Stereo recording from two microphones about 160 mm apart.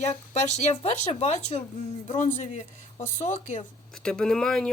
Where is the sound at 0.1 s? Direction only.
45° left (ahead or behind).